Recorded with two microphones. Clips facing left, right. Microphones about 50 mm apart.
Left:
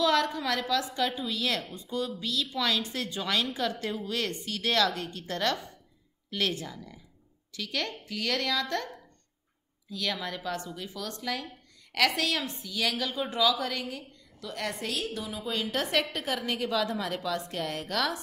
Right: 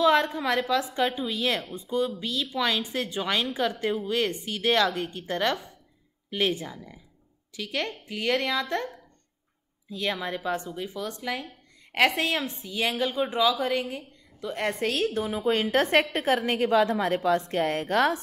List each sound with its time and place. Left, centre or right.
0.0 s a woman's voice: right